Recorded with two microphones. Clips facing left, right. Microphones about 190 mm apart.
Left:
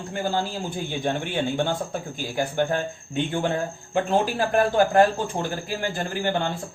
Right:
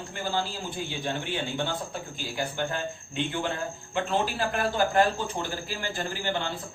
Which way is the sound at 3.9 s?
45° left (ahead or behind).